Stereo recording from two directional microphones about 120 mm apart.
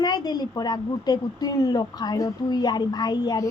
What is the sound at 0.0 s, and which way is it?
A woman's voice, 35° left (ahead or behind).